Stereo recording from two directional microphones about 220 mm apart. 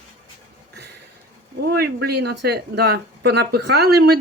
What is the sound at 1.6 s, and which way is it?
Speech, 45° right (ahead or behind).